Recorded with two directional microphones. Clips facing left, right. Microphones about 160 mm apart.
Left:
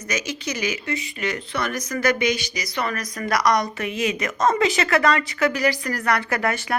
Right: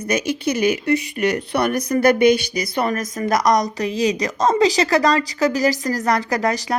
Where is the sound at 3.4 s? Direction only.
40° right (ahead or behind).